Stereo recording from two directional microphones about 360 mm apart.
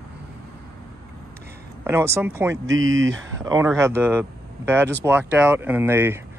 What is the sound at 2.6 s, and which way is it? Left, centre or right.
Speech, right.